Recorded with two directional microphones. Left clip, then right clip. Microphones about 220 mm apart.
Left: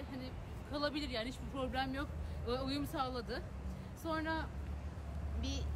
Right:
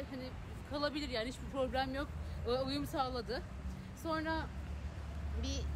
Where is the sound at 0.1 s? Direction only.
20° left (ahead or behind).